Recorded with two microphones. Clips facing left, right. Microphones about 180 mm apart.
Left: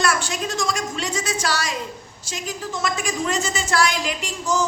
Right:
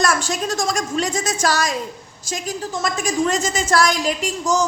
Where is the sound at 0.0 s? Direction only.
40° right (ahead or behind).